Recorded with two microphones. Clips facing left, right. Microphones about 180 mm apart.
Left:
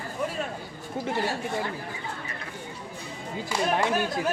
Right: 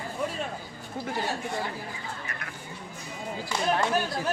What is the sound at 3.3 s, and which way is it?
Speech, 20° left (ahead or behind).